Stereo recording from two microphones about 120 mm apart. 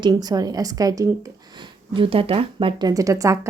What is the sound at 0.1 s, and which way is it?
A woman's voice, 30° right (ahead or behind).